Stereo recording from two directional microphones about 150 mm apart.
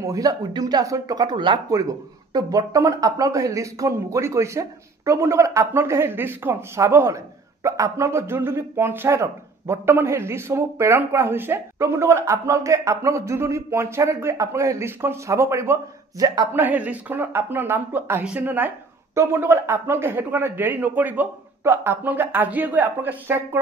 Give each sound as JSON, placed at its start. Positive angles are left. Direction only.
{"t": 0.0, "sound": "speech", "side_deg": -25}
{"t": 16.6, "sound": "speech", "side_deg": -10}